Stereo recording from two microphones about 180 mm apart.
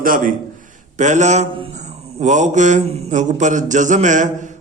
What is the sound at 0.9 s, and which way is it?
Speech, 40° right (ahead or behind).